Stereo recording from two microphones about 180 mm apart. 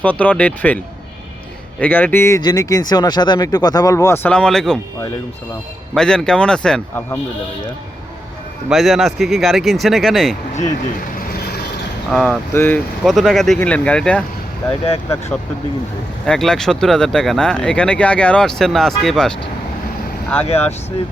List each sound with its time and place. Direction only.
0.0 s speech: 10° left (ahead or behind)
1.8 s speech: 10° left (ahead or behind)
5.9 s speech: 5° left (ahead or behind)
8.7 s speech: centre (ahead or behind)
11.3 s vehicle: 60° left (ahead or behind)
12.1 s speech: centre (ahead or behind)
16.2 s speech: 5° left (ahead or behind)
20.5 s speech: 35° left (ahead or behind)